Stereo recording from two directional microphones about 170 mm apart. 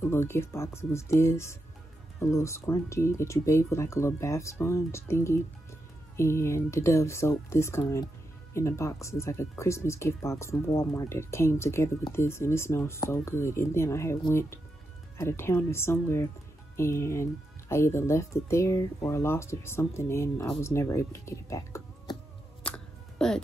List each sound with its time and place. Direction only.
0.0 s speech: 15° left (ahead or behind)
22.6 s music: 5° left (ahead or behind)